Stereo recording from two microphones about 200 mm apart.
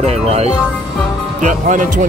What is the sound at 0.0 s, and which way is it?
Speech, 30° right (ahead or behind).